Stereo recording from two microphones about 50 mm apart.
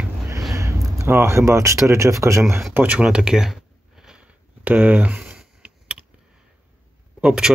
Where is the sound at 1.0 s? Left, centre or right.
Right.